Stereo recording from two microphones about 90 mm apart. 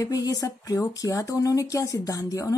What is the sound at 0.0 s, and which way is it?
Speech, 40° left (ahead or behind).